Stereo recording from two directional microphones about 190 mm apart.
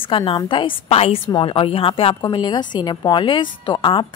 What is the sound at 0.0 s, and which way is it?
A woman's voice, 30° left (ahead or behind).